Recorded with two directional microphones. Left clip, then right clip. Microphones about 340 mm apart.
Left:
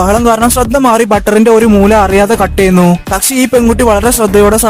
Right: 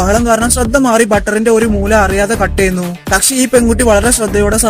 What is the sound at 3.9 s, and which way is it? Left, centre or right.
Speech, left.